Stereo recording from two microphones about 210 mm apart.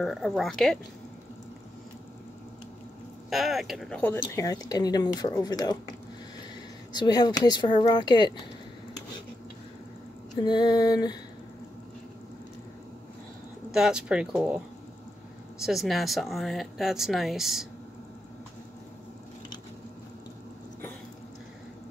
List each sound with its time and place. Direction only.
0.0 s speech: centre (ahead or behind)
3.3 s speech: centre (ahead or behind); by 5.8 s 20° left (ahead or behind)
6.9 s speech: 20° left (ahead or behind)
10.3 s speech: 20° left (ahead or behind)
13.7 s speech: centre (ahead or behind)
15.6 s speech: centre (ahead or behind)